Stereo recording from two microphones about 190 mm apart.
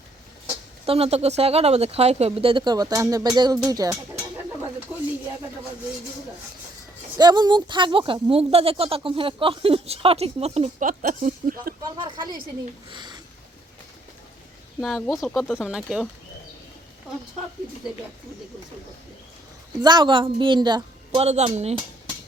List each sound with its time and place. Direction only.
0.9 s speech: 35° right (ahead or behind)
7.2 s speech: 20° right (ahead or behind)
10.8 s speech: 45° right (ahead or behind)
11.9 s speech: 25° right (ahead or behind)
14.8 s speech: centre (ahead or behind)
19.8 s speech: 20° right (ahead or behind)